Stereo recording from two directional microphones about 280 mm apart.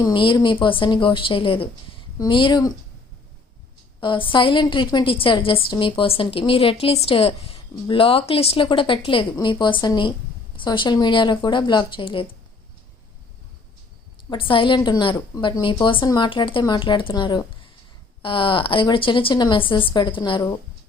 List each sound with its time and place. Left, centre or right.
0.0 s a woman's voice: centre
4.0 s a woman's voice: centre
14.3 s a woman's voice: centre